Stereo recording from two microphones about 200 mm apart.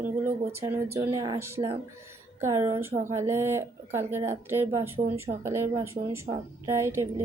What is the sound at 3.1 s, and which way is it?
Speech, 15° right (ahead or behind).